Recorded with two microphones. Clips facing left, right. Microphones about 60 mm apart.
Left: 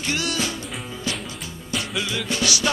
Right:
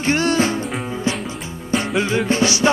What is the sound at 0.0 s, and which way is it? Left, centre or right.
Music, right.